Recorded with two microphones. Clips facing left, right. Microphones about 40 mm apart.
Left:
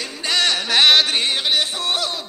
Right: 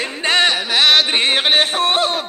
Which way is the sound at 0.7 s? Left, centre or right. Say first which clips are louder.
Even; centre.